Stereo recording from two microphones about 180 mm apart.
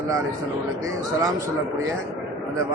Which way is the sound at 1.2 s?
20° right (ahead or behind).